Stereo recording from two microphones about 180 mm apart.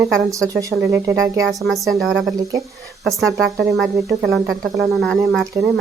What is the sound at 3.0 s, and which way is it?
A woman's voice, centre (ahead or behind).